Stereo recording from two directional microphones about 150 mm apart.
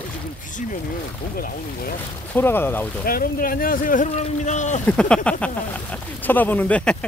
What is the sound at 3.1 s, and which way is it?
Speech, 75° left (ahead or behind).